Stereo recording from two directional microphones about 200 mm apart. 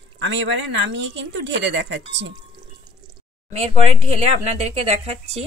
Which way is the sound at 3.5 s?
30° right (ahead or behind).